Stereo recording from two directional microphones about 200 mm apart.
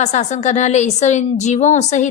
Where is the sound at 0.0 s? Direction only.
35° left (ahead or behind).